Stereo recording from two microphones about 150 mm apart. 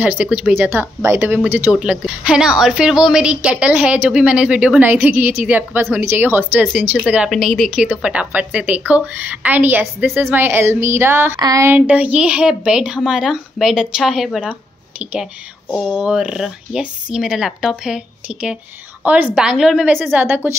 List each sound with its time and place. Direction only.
0.0 s speech: 10° right (ahead or behind)
15.7 s speech: 5° right (ahead or behind)